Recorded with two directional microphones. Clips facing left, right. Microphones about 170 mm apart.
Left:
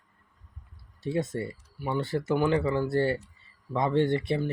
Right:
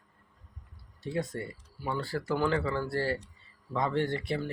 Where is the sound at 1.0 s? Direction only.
25° left (ahead or behind).